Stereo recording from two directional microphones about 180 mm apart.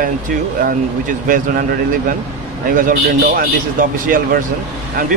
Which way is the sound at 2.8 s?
50° right (ahead or behind).